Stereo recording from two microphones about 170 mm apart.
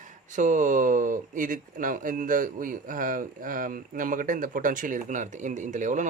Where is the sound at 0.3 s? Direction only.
50° right (ahead or behind).